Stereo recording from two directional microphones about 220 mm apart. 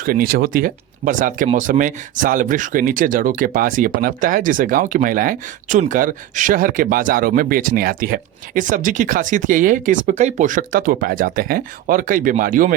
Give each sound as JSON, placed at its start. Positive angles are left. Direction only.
{"t": 0.0, "sound": "speech", "side_deg": -40}